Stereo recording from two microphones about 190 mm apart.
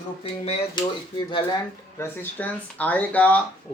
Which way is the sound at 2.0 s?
10° left (ahead or behind).